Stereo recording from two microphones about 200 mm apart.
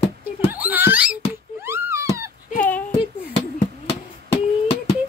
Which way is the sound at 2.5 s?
10° left (ahead or behind).